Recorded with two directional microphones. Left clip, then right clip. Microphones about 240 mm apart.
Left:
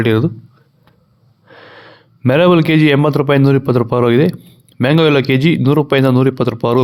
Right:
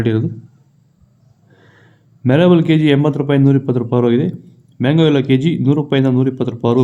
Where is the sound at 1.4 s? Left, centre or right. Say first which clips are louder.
Left 12 dB; left.